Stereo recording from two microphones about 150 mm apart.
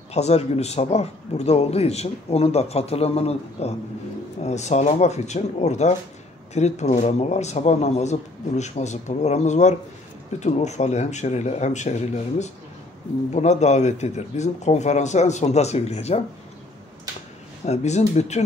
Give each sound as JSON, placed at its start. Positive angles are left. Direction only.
{"t": 0.1, "sound": "a man's voice", "side_deg": 45}
{"t": 17.6, "sound": "a man's voice", "side_deg": 50}